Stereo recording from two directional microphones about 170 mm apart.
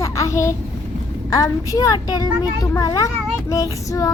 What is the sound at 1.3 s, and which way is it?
Child singing, 20° left (ahead or behind).